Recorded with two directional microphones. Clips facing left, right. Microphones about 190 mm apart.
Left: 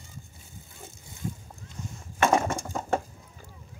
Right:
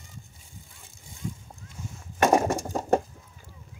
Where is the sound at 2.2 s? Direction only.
40° right (ahead or behind).